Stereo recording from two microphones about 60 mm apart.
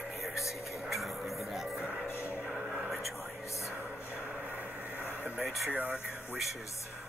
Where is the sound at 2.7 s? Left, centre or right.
Centre.